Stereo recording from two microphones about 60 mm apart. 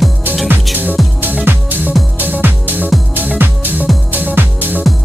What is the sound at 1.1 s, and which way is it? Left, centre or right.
Music, right.